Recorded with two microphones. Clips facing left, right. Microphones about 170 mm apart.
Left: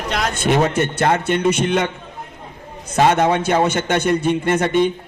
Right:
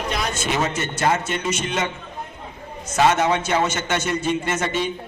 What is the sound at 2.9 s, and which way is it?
Speech, 55° left (ahead or behind).